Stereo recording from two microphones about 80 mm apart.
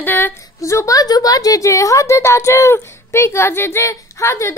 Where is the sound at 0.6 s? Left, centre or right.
Left.